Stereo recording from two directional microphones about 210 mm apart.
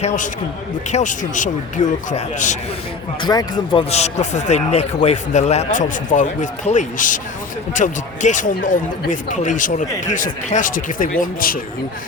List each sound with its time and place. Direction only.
0.9 s speech: 35° left (ahead or behind)
3.2 s speech: 20° left (ahead or behind); by 11.6 s 40° left (ahead or behind)